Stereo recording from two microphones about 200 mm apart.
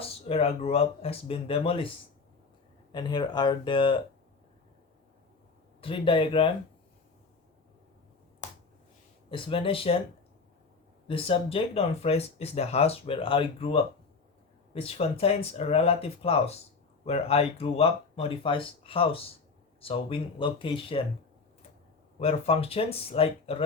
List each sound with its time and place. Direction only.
0.0 s speech: 30° left (ahead or behind)
2.9 s speech: 20° left (ahead or behind)
5.8 s speech: 25° left (ahead or behind)
8.4 s finger snapping: 35° left (ahead or behind)
9.3 s speech: 25° left (ahead or behind)
11.1 s speech: 30° left (ahead or behind)
22.2 s speech: 30° left (ahead or behind)